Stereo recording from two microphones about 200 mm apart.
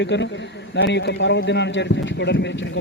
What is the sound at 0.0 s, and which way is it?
A man's voice, 60° left (ahead or behind).